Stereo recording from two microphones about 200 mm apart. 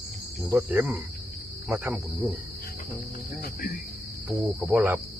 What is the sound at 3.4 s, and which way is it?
Cricket, 50° left (ahead or behind).